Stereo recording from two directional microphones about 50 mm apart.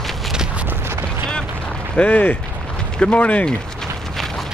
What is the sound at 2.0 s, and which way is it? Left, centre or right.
Speech, left.